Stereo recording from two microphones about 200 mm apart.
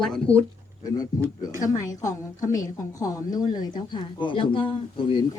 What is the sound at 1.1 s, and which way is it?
A man's voice, 20° left (ahead or behind).